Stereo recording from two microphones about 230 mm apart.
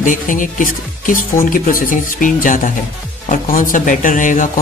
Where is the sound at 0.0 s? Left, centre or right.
Left.